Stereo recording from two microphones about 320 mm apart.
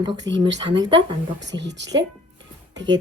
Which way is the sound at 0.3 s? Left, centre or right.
Right.